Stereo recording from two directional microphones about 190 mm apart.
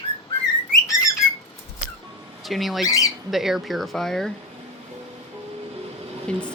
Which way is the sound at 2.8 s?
20° left (ahead or behind).